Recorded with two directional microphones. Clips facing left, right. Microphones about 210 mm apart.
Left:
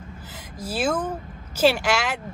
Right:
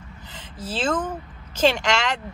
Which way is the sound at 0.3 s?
10° left (ahead or behind).